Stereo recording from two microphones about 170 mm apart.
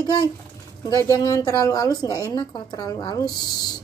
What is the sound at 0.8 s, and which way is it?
Speech, 20° left (ahead or behind).